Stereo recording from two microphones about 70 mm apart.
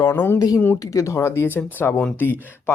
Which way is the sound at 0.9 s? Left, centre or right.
Left.